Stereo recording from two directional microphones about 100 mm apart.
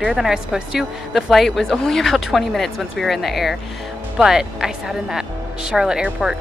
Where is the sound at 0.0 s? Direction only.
5° right (ahead or behind).